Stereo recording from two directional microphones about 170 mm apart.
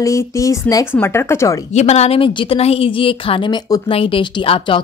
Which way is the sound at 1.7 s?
40° left (ahead or behind).